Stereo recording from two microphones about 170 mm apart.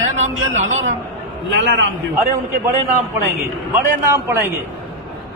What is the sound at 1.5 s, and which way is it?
Speech, 90° right.